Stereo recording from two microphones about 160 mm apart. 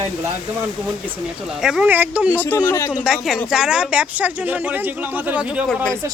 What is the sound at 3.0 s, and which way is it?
Speech, 5° right (ahead or behind).